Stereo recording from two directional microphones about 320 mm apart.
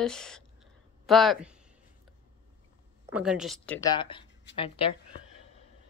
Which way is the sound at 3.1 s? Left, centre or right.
Centre.